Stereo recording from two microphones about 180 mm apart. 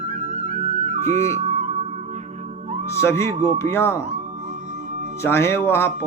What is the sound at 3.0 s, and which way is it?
Speech, 15° left (ahead or behind).